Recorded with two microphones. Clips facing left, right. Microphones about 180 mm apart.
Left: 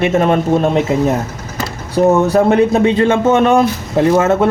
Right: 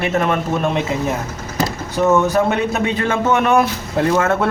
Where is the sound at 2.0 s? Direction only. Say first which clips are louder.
Left 4 dB; 30° left (ahead or behind).